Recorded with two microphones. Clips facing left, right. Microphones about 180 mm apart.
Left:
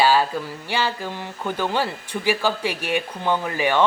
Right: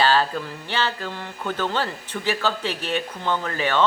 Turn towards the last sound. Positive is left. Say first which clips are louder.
# left 2 dB
turn(degrees=15)  # may be behind; listen again after turning